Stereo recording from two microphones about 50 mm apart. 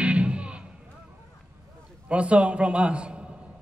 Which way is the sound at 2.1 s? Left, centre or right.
Right.